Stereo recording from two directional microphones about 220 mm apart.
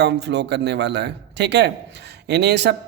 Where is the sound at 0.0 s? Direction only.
50° right (ahead or behind).